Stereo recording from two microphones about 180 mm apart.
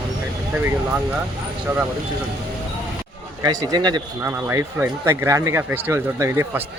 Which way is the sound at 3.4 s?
20° right (ahead or behind).